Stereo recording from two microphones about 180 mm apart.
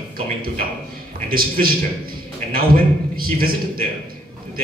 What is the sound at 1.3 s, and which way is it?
A man's voice, 55° right (ahead or behind).